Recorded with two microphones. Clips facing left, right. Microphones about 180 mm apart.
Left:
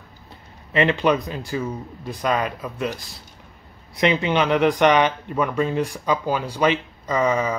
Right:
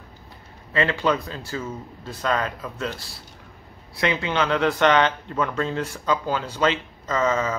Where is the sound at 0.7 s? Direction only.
20° left (ahead or behind).